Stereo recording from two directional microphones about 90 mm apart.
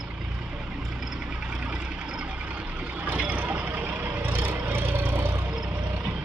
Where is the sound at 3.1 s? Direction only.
15° right (ahead or behind).